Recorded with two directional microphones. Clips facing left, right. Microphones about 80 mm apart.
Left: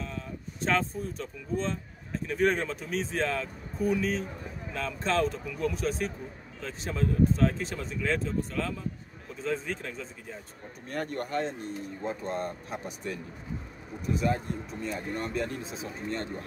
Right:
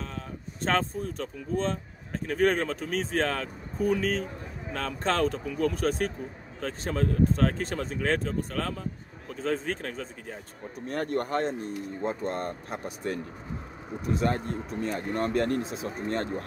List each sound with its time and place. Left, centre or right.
0.6 s speech: right
10.9 s speech: right
14.2 s speech: right